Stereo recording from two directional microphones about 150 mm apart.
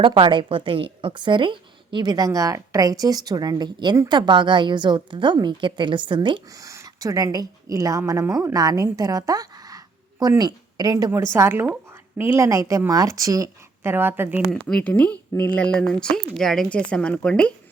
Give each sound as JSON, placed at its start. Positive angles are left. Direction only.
{"t": 0.0, "sound": "a woman's voice", "side_deg": -35}
{"t": 6.7, "sound": "a woman's voice", "side_deg": -20}
{"t": 14.5, "sound": "a woman's voice", "side_deg": 5}